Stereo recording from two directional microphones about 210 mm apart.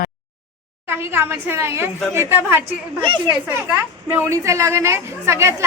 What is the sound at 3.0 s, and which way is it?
A woman's voice, 20° right (ahead or behind).